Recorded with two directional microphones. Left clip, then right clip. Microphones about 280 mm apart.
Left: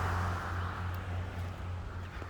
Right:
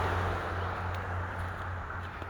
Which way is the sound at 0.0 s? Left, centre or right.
Right.